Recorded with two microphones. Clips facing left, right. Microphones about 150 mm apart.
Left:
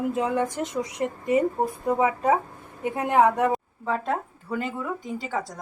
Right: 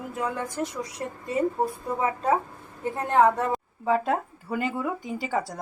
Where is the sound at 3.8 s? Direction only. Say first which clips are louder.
Right 7 dB; 5° right (ahead or behind).